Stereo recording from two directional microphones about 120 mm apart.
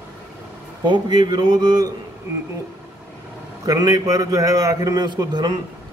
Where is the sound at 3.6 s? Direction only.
30° right (ahead or behind).